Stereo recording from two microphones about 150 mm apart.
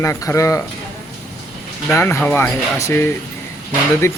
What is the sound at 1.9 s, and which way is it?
Speech, 15° left (ahead or behind).